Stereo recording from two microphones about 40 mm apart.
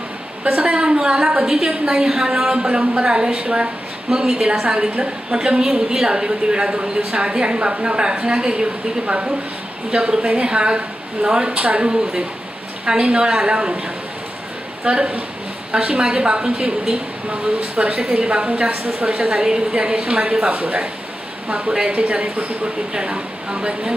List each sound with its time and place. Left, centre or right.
0.4 s a woman's voice: right; by 2.6 s centre
2.6 s a woman's voice: right
5.6 s a woman's voice: centre
11.8 s a woman's voice: centre
14.8 s a woman's voice: right
22.9 s a woman's voice: right